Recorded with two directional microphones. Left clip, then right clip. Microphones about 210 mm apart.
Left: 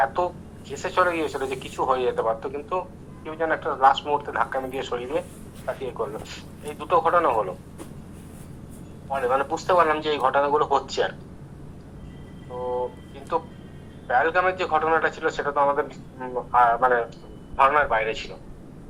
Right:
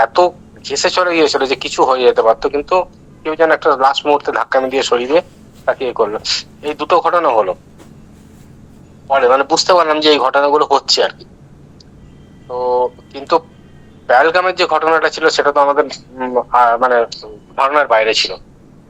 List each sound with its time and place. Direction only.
0.0 s a man's voice: 60° right (ahead or behind)
9.0 s a man's voice: 55° right (ahead or behind)
12.5 s a man's voice: 55° right (ahead or behind)